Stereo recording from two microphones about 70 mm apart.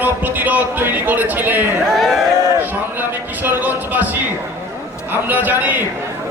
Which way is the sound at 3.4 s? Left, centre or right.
Right.